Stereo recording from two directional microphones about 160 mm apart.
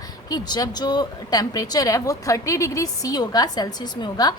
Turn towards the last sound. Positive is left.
turn(degrees=25)  # may be behind; listen again after turning